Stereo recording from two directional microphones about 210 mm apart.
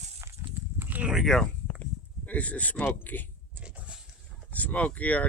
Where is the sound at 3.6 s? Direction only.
5° right (ahead or behind).